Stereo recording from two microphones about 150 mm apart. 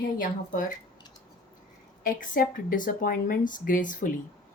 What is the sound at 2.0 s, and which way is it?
Speech, 70° left (ahead or behind).